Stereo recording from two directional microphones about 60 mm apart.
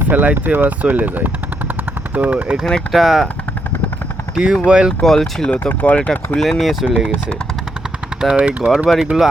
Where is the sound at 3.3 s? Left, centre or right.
Left.